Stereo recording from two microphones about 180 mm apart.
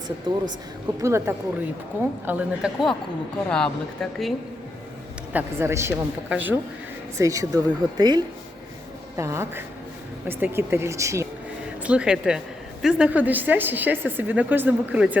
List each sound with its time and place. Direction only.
0.3 s speech: 25° right (ahead or behind)
1.0 s a woman's voice: 15° right (ahead or behind); by 4.4 s centre (ahead or behind)
5.3 s a woman's voice: 10° right (ahead or behind)
11.8 s a woman's voice: 5° right (ahead or behind)